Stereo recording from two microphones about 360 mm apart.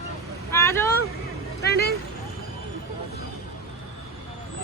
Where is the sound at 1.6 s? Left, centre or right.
Left.